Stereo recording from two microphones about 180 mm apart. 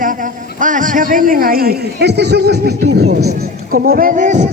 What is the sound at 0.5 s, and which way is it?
A man's voice, 45° right (ahead or behind).